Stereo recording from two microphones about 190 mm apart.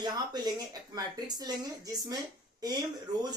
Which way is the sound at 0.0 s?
20° right (ahead or behind).